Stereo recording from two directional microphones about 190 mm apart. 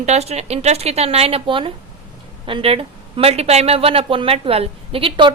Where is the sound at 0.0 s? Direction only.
35° right (ahead or behind).